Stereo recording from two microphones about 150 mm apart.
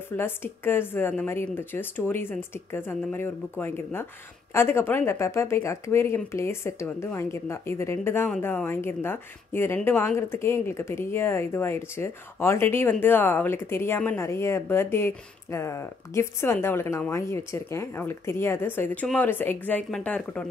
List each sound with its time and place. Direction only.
0.1 s speech: 15° left (ahead or behind)